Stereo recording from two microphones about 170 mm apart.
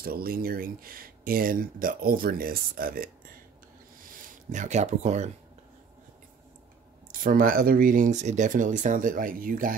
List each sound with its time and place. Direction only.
0.0 s speech: 60° right (ahead or behind)
4.1 s speech: 50° right (ahead or behind)
7.1 s speech: 55° right (ahead or behind)